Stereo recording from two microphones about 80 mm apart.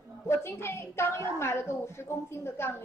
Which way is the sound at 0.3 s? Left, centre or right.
Left.